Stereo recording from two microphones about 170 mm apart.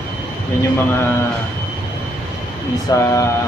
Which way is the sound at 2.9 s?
20° left (ahead or behind).